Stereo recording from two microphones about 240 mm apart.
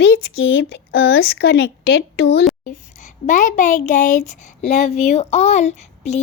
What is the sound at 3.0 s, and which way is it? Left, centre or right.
Speech, left.